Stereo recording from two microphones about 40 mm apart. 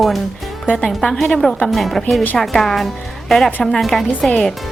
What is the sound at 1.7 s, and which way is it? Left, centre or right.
Speech, centre.